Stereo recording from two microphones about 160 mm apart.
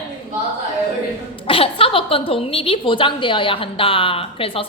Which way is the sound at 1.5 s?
35° left (ahead or behind).